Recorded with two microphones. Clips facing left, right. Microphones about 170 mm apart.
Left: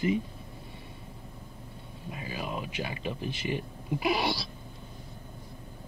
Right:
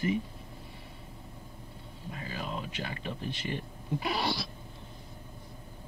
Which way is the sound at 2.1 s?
15° left (ahead or behind).